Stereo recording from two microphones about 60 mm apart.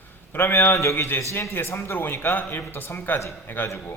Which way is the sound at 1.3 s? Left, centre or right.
Left.